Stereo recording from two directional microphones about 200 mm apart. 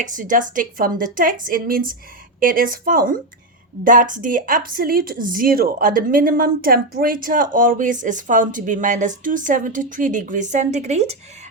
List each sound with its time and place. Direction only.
0.0 s a woman's voice: 40° right (ahead or behind)